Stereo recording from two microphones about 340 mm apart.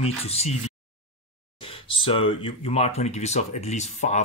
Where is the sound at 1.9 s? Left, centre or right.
Centre.